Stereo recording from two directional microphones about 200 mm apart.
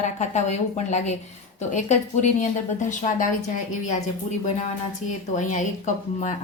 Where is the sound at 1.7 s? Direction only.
35° left (ahead or behind).